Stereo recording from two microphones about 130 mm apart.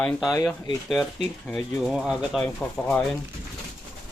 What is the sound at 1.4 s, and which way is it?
Speech, centre (ahead or behind).